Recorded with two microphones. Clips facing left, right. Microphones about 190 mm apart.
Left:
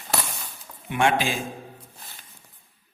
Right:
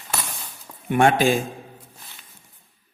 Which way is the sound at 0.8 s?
45° right (ahead or behind).